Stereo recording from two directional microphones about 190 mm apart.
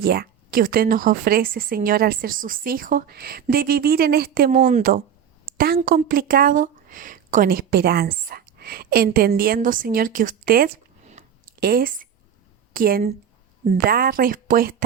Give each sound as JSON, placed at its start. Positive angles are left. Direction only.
{"t": 0.0, "sound": "speech", "side_deg": -50}
{"t": 11.1, "sound": "a sound", "side_deg": -50}
{"t": 12.7, "sound": "speech", "side_deg": -50}